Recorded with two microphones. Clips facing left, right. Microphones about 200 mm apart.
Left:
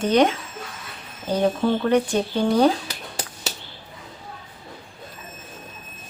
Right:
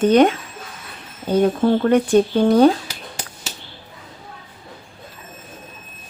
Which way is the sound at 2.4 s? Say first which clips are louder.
Right 4 dB; 55° right (ahead or behind).